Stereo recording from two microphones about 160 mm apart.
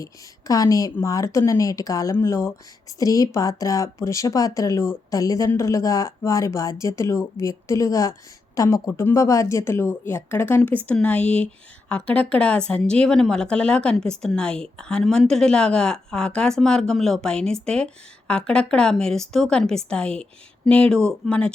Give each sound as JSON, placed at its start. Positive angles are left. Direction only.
{"t": 0.0, "sound": "a woman's voice", "side_deg": 20}